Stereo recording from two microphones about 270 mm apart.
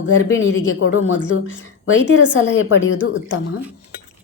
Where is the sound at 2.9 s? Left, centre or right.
Left.